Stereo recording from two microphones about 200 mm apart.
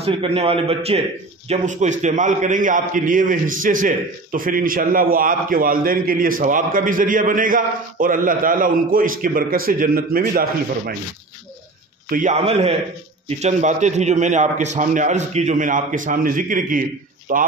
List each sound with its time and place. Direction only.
0.0 s a man's voice: 30° right (ahead or behind); by 11.0 s 45° right (ahead or behind)
12.1 s a man's voice: 40° right (ahead or behind)